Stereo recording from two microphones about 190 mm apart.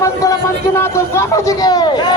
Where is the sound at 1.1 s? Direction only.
15° left (ahead or behind).